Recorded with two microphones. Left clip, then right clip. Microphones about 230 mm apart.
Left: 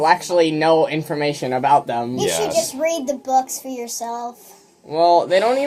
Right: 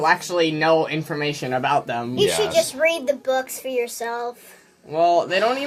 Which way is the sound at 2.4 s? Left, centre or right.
Right.